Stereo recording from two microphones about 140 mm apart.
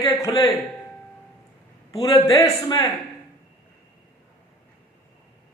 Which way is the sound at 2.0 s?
25° left (ahead or behind).